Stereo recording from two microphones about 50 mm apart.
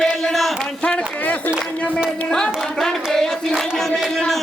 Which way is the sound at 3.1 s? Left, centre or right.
Centre.